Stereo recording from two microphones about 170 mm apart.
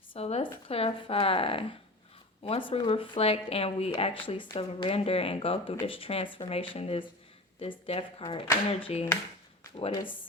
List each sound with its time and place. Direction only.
0.1 s speech: 40° left (ahead or behind)